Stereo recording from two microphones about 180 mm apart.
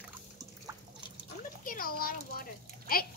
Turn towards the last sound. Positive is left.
turn(degrees=55)  # may be behind; listen again after turning